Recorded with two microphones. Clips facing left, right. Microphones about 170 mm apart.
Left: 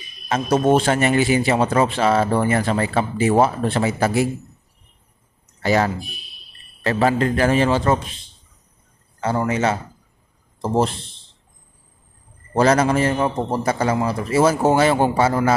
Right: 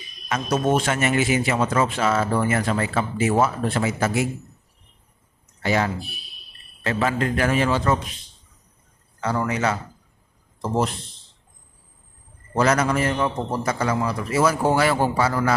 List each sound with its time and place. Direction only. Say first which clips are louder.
0.5 s speech: left 5 dB; 30° left (ahead or behind)
5.6 s speech: left 4 dB; 40° left (ahead or behind)
9.2 s speech: left 3 dB; 25° left (ahead or behind)
12.5 s speech: left 4 dB; 30° left (ahead or behind)